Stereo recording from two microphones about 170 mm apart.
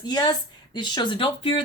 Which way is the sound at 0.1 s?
25° left (ahead or behind).